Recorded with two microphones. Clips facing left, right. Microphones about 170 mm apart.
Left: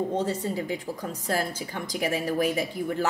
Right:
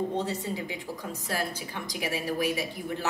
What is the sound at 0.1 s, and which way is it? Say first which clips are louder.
A woman's voice: left 3 dB; 45° left (ahead or behind).